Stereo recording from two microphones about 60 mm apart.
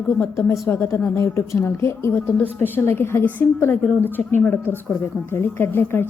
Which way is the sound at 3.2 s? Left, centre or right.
Left.